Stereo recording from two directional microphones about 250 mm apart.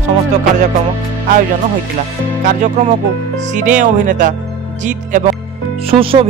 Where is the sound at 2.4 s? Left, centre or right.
Right.